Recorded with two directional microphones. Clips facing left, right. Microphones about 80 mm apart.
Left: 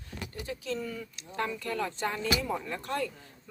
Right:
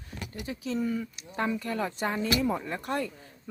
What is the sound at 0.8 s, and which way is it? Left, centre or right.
Speech, right.